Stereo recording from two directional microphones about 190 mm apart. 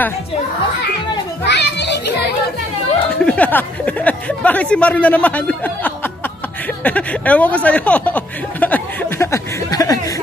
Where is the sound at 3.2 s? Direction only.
10° left (ahead or behind).